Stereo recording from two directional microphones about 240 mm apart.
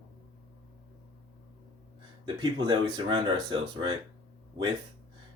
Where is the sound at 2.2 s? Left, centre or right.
Centre.